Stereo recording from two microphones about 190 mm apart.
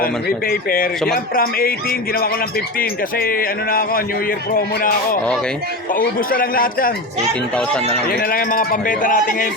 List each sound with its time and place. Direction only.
0.0 s speech: 50° left (ahead or behind)
8.1 s speech: 50° left (ahead or behind)